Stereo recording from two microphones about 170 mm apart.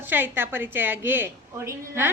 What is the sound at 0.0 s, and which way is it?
A woman's voice, 10° right (ahead or behind).